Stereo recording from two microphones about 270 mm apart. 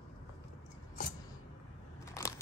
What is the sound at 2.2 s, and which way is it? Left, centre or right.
Crackle, centre.